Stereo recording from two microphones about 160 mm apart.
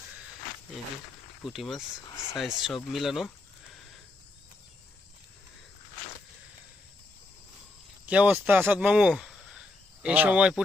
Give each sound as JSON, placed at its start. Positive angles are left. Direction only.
{"t": 1.5, "sound": "speech", "side_deg": 0}
{"t": 8.0, "sound": "speech", "side_deg": -10}